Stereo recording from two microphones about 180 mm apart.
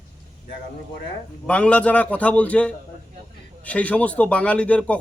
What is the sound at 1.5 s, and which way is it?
A man's voice, 5° left (ahead or behind).